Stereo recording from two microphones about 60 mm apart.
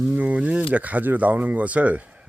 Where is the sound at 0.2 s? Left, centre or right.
Right.